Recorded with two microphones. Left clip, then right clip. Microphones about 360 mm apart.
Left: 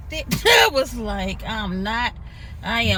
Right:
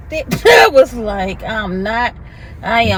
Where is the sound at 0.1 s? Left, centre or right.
Centre.